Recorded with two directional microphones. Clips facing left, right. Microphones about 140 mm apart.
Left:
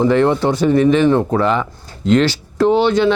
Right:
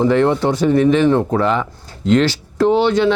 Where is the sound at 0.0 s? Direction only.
20° left (ahead or behind).